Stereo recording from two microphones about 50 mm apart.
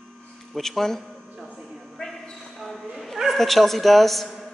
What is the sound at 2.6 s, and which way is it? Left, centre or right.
Dog, centre.